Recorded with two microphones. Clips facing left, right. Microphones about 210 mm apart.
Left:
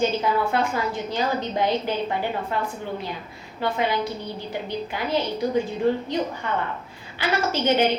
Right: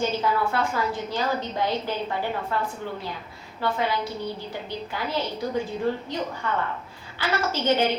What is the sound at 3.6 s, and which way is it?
A woman's voice, 15° left (ahead or behind).